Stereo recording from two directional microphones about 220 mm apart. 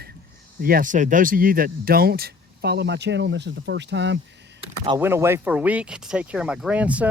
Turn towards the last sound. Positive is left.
turn(degrees=-5)  # may be behind; listen again after turning